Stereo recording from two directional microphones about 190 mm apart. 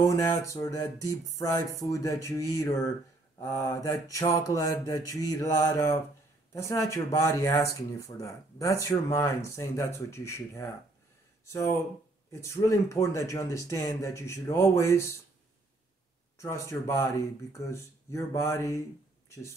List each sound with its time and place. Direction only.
0.0 s speech: 15° left (ahead or behind)
16.3 s speech: 15° left (ahead or behind)
19.2 s a sound: 15° left (ahead or behind)